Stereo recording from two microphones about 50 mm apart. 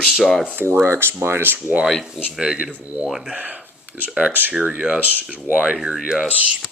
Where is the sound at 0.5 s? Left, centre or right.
Right.